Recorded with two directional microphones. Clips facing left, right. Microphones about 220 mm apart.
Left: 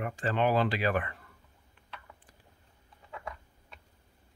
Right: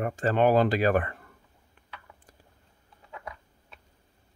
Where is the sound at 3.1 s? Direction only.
Centre (ahead or behind).